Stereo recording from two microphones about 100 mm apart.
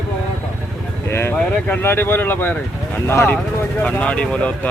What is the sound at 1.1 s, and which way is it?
Speech, 25° left (ahead or behind).